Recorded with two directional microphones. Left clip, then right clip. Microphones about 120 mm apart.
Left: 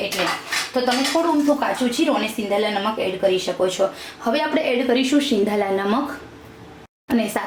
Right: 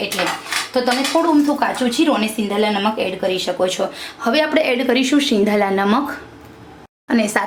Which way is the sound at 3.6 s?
45° right (ahead or behind).